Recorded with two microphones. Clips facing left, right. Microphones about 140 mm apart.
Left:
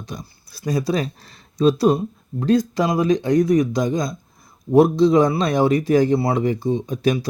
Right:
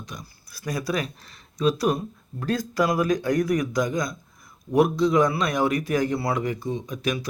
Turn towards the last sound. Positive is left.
turn(degrees=30)  # may be behind; listen again after turning